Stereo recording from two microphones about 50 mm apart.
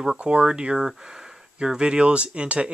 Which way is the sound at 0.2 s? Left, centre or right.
Right.